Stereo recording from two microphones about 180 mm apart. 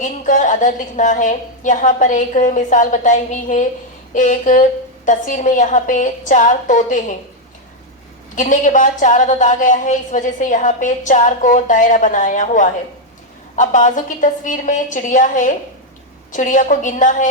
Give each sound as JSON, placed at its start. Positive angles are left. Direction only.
{"t": 0.0, "sound": "a woman's voice", "side_deg": 45}
{"t": 8.4, "sound": "a woman's voice", "side_deg": 45}